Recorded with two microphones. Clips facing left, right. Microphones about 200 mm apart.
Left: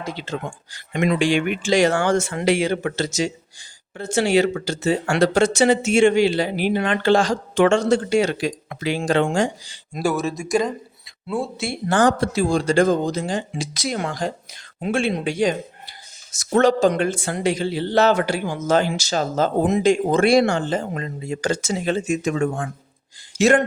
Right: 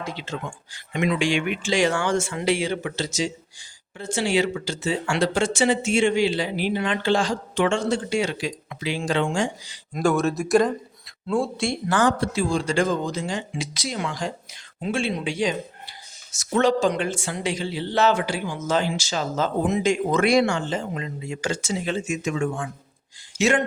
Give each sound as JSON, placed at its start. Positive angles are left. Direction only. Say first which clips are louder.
{"t": 0.0, "sound": "a man's voice", "louder": "left 3 dB", "side_deg": 35}
{"t": 1.8, "sound": "speech", "louder": "left 3 dB", "side_deg": 55}
{"t": 5.3, "sound": "a man's voice", "louder": "left 5 dB", "side_deg": 40}
{"t": 5.9, "sound": "speech", "louder": "left 5 dB", "side_deg": 70}
{"t": 7.2, "sound": "speech", "louder": "left 5 dB", "side_deg": 45}
{"t": 9.4, "sound": "a man's voice", "louder": "left 4 dB", "side_deg": 30}
{"t": 10.0, "sound": "speech", "louder": "right 1 dB", "side_deg": 5}
{"t": 11.9, "sound": "a man's voice", "louder": "left 5 dB", "side_deg": 35}
{"t": 13.8, "sound": "a man's voice", "louder": "left 4 dB", "side_deg": 50}
{"t": 20.6, "sound": "a man's voice", "louder": "left 4 dB", "side_deg": 45}